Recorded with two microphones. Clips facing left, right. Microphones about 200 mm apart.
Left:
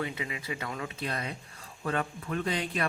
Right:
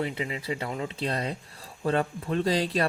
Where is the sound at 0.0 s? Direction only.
30° right (ahead or behind).